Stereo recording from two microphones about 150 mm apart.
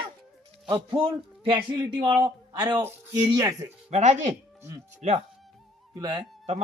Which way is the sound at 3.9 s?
50° right (ahead or behind).